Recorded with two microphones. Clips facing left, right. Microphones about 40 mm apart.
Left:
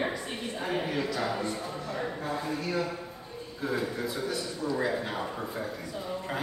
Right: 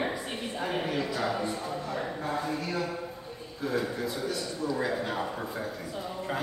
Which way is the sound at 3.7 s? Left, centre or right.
Centre.